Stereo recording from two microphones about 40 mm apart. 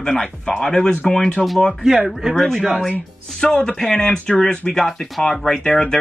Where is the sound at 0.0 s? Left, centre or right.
Centre.